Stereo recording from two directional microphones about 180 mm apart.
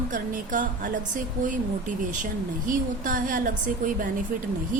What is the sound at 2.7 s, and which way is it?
A woman's voice, 50° right (ahead or behind).